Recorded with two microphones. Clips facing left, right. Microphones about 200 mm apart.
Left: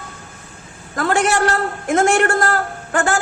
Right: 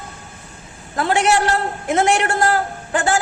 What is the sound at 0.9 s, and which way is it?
A man's voice, 45° left (ahead or behind).